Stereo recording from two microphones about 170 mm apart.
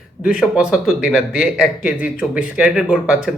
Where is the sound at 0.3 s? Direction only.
5° right (ahead or behind).